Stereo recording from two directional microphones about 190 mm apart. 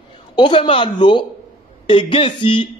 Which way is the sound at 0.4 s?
25° left (ahead or behind).